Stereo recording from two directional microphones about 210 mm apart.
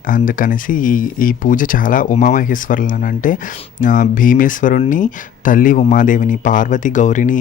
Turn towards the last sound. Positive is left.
turn(degrees=40)  # may be behind; listen again after turning